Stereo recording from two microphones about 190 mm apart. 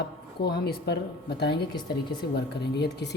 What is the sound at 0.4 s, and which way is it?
Speech, 60° left (ahead or behind).